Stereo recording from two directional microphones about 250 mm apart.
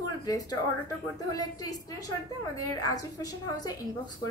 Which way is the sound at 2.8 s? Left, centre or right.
Centre.